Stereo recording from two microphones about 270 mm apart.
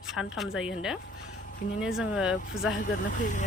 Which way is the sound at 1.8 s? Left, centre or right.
Centre.